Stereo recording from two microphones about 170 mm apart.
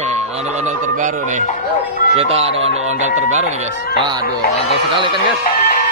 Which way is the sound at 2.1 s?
35° right (ahead or behind).